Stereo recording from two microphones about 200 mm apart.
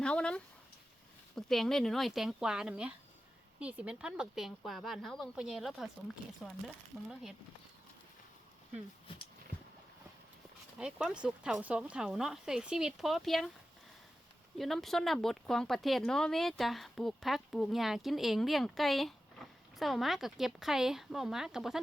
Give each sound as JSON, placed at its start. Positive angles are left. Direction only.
{"t": 0.0, "sound": "speech", "side_deg": 5}
{"t": 10.8, "sound": "speech", "side_deg": -5}
{"t": 14.6, "sound": "speech", "side_deg": 0}